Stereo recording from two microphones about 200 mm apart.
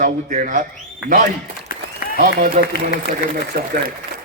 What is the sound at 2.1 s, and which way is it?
A man's voice, 45° right (ahead or behind).